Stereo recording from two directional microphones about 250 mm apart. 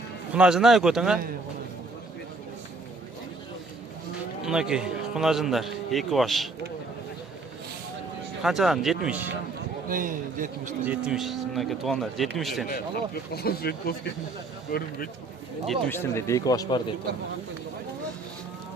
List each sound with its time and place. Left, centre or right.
0.3 s a man's voice: centre
4.4 s a man's voice: centre
8.4 s a man's voice: centre
9.9 s a man's voice: right
10.8 s a man's voice: centre
13.3 s speech: left
15.6 s speech: centre